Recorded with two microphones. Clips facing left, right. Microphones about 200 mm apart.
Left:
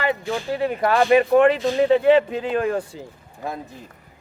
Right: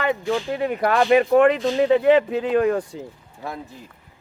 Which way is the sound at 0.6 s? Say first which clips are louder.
Left 2 dB; 30° left (ahead or behind).